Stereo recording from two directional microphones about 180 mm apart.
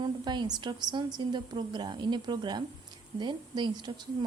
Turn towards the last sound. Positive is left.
turn(degrees=-25)  # may be behind; listen again after turning